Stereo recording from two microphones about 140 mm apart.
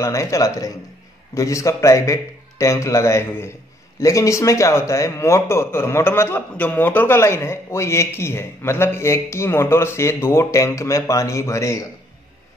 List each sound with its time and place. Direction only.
0.0 s a man's voice: 20° left (ahead or behind)